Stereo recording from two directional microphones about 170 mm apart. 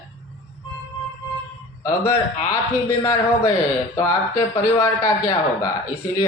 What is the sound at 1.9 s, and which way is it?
A man's voice, 15° left (ahead or behind).